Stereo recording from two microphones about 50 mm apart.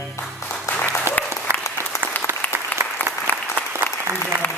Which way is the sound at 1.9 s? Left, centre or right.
Left.